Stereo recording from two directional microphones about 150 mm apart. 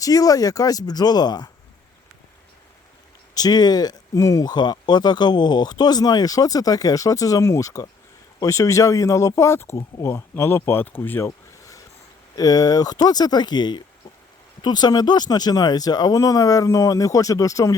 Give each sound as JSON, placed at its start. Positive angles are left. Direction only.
{"t": 0.0, "sound": "speech", "side_deg": 25}
{"t": 3.3, "sound": "speech", "side_deg": 25}
{"t": 11.3, "sound": "a sound", "side_deg": 20}
{"t": 12.4, "sound": "speech", "side_deg": 25}